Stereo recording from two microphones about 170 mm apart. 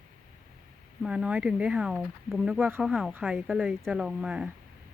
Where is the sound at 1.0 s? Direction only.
5° right (ahead or behind).